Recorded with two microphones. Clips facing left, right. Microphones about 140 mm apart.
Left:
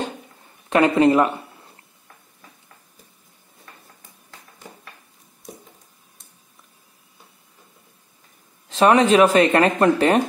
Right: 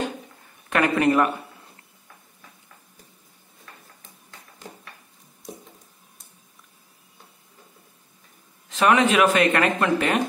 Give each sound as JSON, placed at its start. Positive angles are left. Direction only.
{"t": 0.7, "sound": "speech", "side_deg": 25}
{"t": 8.6, "sound": "speech", "side_deg": 35}